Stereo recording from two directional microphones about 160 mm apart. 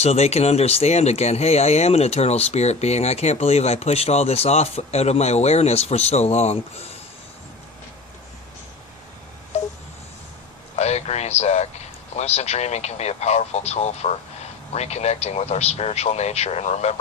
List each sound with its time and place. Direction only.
0.0 s speech: 40° left (ahead or behind)
10.8 s speech: 45° left (ahead or behind)